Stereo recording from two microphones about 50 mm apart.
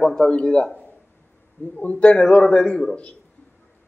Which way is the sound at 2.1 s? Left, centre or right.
Centre.